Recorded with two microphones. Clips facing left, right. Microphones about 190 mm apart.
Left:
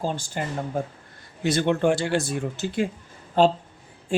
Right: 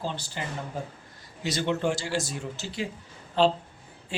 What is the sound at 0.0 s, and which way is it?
Speech, 45° left (ahead or behind).